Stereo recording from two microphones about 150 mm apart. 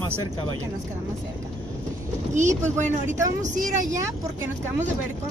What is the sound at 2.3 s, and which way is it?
Speech, 55° right (ahead or behind).